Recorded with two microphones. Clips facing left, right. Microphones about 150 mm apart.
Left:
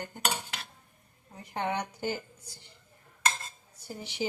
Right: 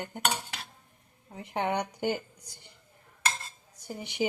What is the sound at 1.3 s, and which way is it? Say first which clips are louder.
Speech: right 2 dB; 20° right (ahead or behind).